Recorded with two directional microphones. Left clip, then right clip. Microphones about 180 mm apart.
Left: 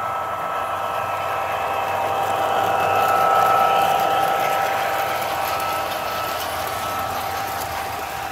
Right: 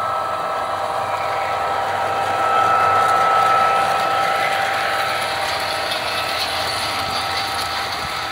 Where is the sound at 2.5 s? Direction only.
45° left (ahead or behind).